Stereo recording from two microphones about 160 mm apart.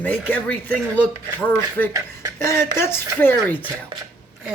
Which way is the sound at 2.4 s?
15° left (ahead or behind).